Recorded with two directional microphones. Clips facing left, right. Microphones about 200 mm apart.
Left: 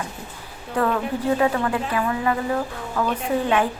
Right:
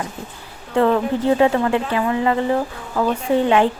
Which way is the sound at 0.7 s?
25° right (ahead or behind).